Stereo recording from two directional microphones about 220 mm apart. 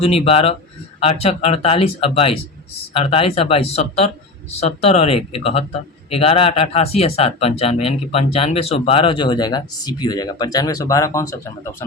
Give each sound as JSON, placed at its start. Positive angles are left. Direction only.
{"t": 0.0, "sound": "speech", "side_deg": 25}